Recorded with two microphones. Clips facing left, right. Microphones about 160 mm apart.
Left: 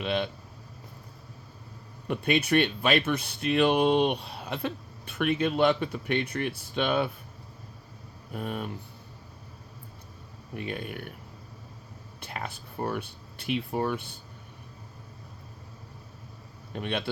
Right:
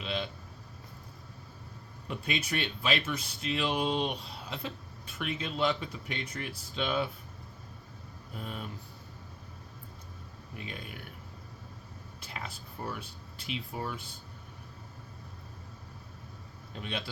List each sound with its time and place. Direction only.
0.0 s a sound: 60° left (ahead or behind)
2.0 s speech: 60° left (ahead or behind)
8.3 s speech: 60° left (ahead or behind)
10.5 s speech: 55° left (ahead or behind)
12.2 s speech: 60° left (ahead or behind)
16.7 s speech: 60° left (ahead or behind)